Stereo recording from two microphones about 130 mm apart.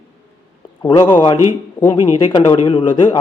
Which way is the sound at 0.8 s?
35° left (ahead or behind).